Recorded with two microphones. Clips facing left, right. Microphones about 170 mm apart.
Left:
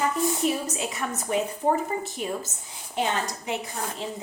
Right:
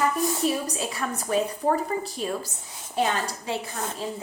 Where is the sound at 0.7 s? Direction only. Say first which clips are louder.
Right 1 dB; 20° left (ahead or behind).